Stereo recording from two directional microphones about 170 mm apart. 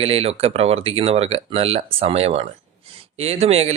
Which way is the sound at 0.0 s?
35° right (ahead or behind).